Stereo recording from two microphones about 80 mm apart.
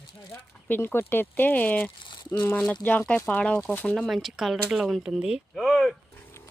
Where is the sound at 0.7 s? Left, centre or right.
Left.